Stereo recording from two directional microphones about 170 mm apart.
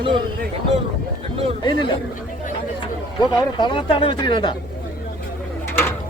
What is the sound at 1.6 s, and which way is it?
A man's voice, 30° left (ahead or behind).